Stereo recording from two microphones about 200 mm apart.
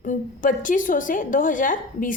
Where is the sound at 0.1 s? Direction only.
40° left (ahead or behind).